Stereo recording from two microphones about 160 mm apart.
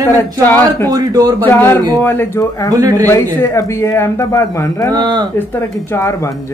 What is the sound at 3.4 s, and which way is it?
Speech, 20° left (ahead or behind).